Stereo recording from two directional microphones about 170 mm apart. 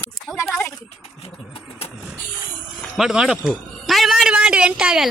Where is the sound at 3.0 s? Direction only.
5° right (ahead or behind).